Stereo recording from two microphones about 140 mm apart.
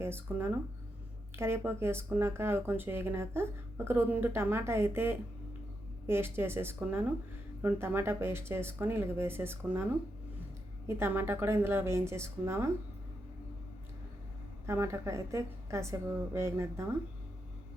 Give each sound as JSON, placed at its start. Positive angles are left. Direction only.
{"t": 0.0, "sound": "speech", "side_deg": -15}
{"t": 10.8, "sound": "speech", "side_deg": -15}
{"t": 14.7, "sound": "a woman's voice", "side_deg": -20}